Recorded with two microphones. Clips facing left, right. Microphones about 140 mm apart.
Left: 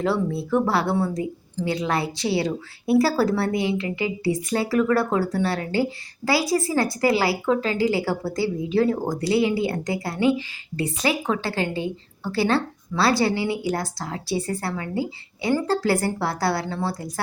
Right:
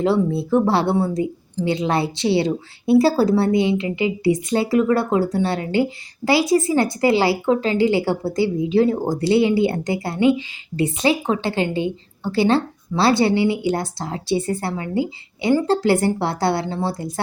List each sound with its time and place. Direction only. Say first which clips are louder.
0.0 s a woman's voice: right 5 dB; 25° right (ahead or behind)